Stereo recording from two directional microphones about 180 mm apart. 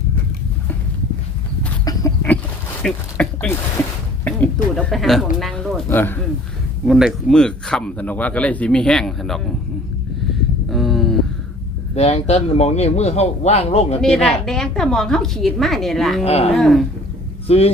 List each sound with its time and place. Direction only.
1.8 s chicken: 20° left (ahead or behind)
2.8 s speech: 5° left (ahead or behind)
6.8 s speech: centre (ahead or behind)
10.7 s a sound: centre (ahead or behind)
11.9 s speech: 35° left (ahead or behind)
14.0 s speech: centre (ahead or behind)
16.2 s speech: 35° left (ahead or behind)
16.6 s speech: centre (ahead or behind)
17.4 s speech: 35° left (ahead or behind)